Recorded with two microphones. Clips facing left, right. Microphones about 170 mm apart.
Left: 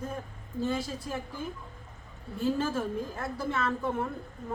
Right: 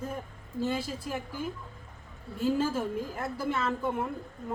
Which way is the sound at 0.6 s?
10° right (ahead or behind).